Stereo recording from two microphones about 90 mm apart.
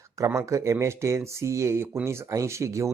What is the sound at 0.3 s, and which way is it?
Speech, 35° right (ahead or behind).